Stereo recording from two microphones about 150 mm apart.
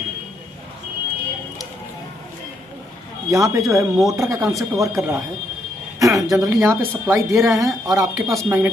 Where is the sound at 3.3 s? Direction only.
20° right (ahead or behind).